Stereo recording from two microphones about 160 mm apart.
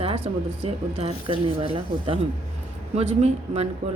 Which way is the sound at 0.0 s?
40° right (ahead or behind).